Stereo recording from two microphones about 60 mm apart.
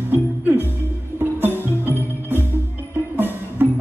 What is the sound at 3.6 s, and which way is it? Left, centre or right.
Music, right.